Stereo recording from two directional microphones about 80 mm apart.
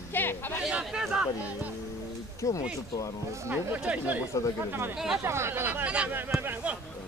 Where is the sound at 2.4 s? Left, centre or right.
Left.